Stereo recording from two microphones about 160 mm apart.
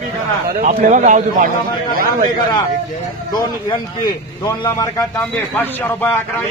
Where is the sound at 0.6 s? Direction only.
50° right (ahead or behind).